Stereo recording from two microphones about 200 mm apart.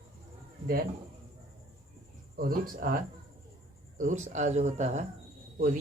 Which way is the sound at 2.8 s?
45° right (ahead or behind).